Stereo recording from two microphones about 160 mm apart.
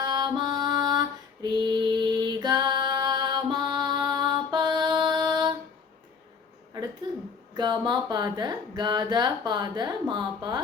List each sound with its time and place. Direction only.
0.0 s female singing: 25° right (ahead or behind)
7.5 s speech: 30° right (ahead or behind)